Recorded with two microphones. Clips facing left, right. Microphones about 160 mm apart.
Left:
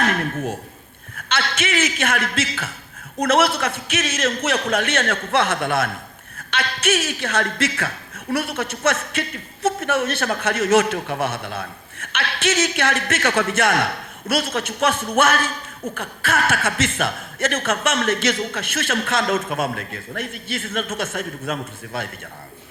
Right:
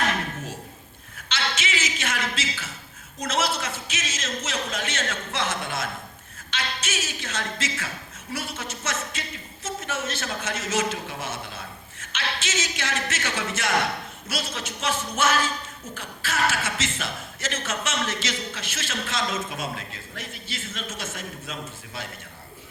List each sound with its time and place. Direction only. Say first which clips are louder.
1.1 s a man's voice: left 5 dB; 55° left (ahead or behind)